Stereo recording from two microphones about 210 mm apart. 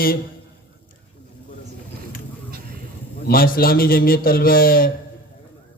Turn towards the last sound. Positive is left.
turn(degrees=45)  # may be behind; listen again after turning